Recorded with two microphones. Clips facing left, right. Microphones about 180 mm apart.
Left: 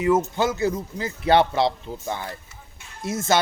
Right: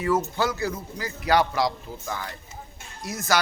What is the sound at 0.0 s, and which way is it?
A man's voice, 20° left (ahead or behind).